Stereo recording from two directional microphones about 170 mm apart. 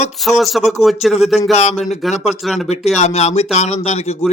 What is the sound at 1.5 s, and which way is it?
Speech, 40° left (ahead or behind).